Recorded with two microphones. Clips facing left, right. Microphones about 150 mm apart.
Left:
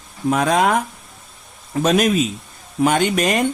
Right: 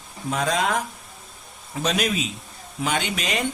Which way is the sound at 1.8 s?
50° left (ahead or behind).